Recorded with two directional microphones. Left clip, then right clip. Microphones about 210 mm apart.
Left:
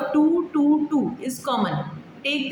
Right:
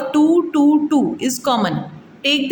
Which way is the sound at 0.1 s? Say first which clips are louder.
Right 7 dB; 50° right (ahead or behind).